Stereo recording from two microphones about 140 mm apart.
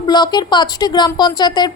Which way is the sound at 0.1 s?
30° left (ahead or behind).